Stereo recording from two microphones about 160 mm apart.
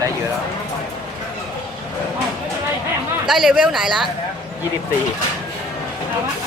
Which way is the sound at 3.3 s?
5° right (ahead or behind).